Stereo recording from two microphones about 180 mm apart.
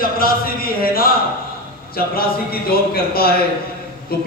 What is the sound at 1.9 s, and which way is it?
A man's voice, 55° left (ahead or behind).